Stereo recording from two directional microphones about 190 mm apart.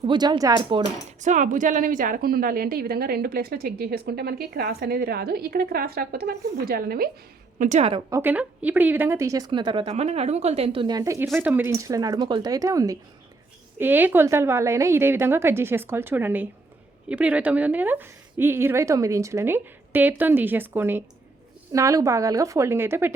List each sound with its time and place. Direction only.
0.0 s a woman's voice: 25° right (ahead or behind)
1.2 s a woman's voice: 40° right (ahead or behind)
7.6 s a woman's voice: 35° right (ahead or behind)
8.1 s a woman's voice: 10° right (ahead or behind)